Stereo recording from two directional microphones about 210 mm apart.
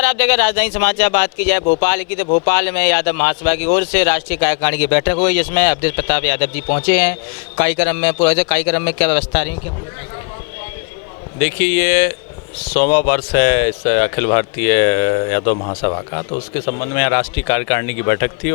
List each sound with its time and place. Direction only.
0.0 s speech: 10° left (ahead or behind)
11.3 s speech: 15° left (ahead or behind)
16.8 s speech: 15° left (ahead or behind)